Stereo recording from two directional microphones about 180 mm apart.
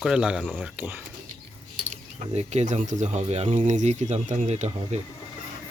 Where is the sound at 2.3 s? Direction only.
40° right (ahead or behind).